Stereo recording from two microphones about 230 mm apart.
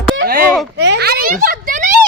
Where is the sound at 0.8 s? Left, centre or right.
Right.